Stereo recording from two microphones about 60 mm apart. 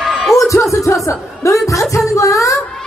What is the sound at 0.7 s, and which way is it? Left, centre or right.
Speech, left.